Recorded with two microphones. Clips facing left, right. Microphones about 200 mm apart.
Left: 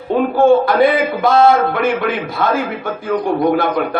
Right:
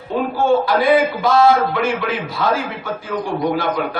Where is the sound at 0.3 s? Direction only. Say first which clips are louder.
Left 5 dB; 55° left (ahead or behind).